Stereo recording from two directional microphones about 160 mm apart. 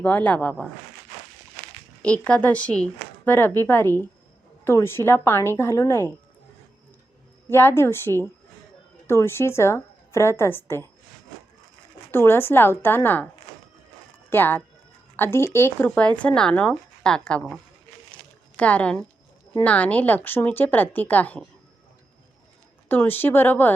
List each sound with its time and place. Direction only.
0.0 s speech: 10° left (ahead or behind)
2.0 s speech: 10° left (ahead or behind)
7.5 s speech: 15° left (ahead or behind)
12.1 s speech: 15° left (ahead or behind)
14.3 s a woman's voice: 10° left (ahead or behind)
18.1 s a sound: 10° left (ahead or behind)
19.5 s speech: 10° left (ahead or behind)
22.9 s speech: 10° left (ahead or behind)